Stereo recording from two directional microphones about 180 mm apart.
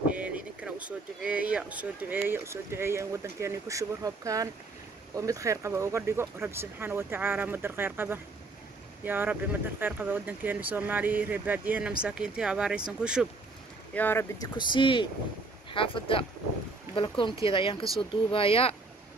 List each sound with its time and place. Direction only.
0.2 s a sound: 5° right (ahead or behind)
0.8 s speech: 5° right (ahead or behind)
13.9 s speech: 10° left (ahead or behind)
14.6 s speech: 25° left (ahead or behind)